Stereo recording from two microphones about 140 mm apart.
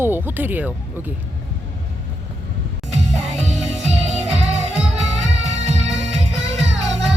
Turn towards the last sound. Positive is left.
turn(degrees=-50)  # may be behind; listen again after turning